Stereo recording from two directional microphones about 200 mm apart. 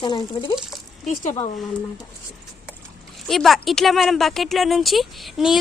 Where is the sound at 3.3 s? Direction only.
Centre (ahead or behind).